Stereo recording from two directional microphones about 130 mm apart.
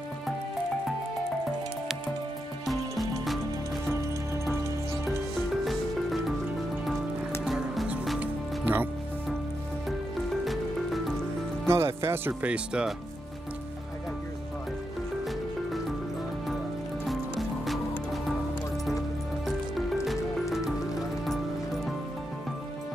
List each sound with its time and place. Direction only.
2.6 s music: centre (ahead or behind)
7.4 s music: 5° right (ahead or behind)
8.2 s music: 15° right (ahead or behind)
10.4 s music: centre (ahead or behind)
11.6 s music: 20° right (ahead or behind)
12.3 s speech: 10° right (ahead or behind)
17.0 s music: centre (ahead or behind)
20.1 s music: centre (ahead or behind)